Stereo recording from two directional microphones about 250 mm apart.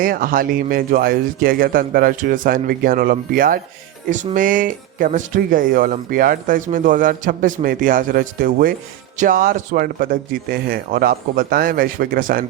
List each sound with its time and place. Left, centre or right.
0.0 s speech: right